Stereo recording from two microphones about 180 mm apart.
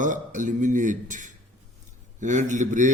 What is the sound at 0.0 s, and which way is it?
Speech, 45° right (ahead or behind).